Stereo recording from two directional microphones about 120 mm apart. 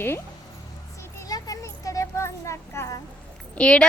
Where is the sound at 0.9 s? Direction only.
25° left (ahead or behind).